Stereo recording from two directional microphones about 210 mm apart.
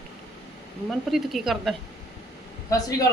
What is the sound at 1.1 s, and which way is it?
Speech, centre (ahead or behind).